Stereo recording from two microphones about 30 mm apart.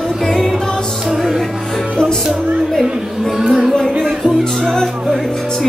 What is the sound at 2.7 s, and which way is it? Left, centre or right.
Music, centre.